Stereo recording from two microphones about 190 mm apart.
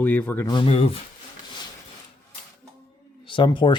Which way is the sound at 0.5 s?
30° left (ahead or behind).